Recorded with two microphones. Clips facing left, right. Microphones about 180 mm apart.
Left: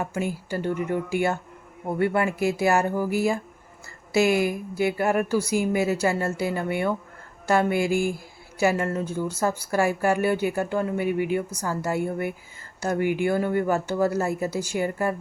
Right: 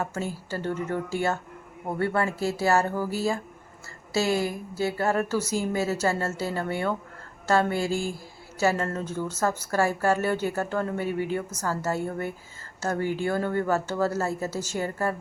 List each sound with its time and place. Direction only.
0.0 s a woman's voice: 15° left (ahead or behind)